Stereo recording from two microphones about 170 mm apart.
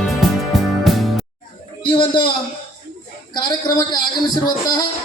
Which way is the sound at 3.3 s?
25° left (ahead or behind).